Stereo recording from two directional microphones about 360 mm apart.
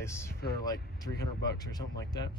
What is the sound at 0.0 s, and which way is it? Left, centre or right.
Speech, centre.